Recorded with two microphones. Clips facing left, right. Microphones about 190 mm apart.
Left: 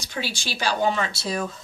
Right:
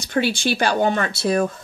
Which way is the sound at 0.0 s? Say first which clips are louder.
Right 10 dB; 55° right (ahead or behind).